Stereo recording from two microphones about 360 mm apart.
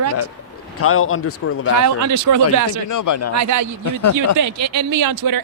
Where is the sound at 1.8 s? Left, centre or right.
Right.